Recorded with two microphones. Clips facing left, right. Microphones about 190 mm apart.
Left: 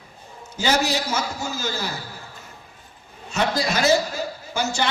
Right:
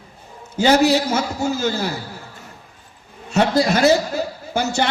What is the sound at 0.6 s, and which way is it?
A man's voice, 60° right (ahead or behind).